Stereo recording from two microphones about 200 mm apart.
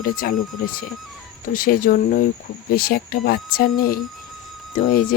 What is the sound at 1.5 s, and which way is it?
Speech, 45° left (ahead or behind).